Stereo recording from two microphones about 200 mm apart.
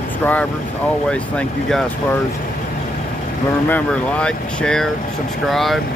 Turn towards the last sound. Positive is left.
turn(degrees=0)  # may be behind; listen again after turning